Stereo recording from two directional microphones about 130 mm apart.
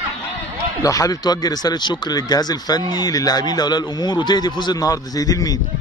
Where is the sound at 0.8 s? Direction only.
25° left (ahead or behind).